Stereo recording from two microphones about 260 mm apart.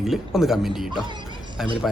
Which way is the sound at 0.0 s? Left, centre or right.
Centre.